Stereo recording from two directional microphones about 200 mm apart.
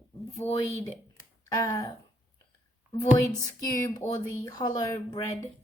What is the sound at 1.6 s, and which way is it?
Speech, 15° left (ahead or behind).